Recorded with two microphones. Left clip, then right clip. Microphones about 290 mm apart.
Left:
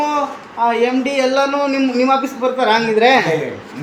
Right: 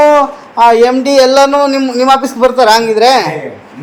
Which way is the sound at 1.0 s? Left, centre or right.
Right.